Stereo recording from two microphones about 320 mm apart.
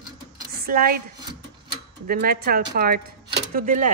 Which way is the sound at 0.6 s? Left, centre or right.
Right.